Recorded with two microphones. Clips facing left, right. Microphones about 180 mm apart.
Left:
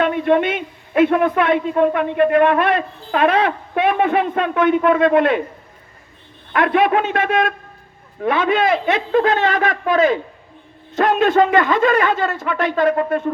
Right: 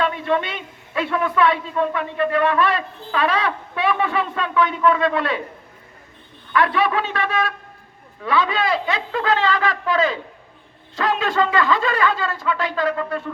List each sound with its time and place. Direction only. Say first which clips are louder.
0.0 s a man's voice: left 6 dB; 50° left (ahead or behind)
6.5 s a man's voice: left 4 dB; 50° left (ahead or behind)